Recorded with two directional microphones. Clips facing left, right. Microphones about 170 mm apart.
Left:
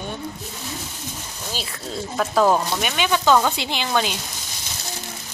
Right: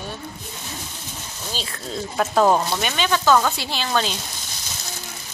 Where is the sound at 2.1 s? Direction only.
10° right (ahead or behind).